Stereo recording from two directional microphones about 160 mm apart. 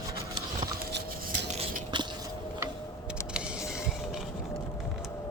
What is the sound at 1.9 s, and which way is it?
Biting, 30° right (ahead or behind).